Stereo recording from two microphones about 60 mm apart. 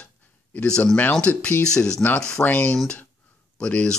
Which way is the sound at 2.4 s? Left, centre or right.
Left.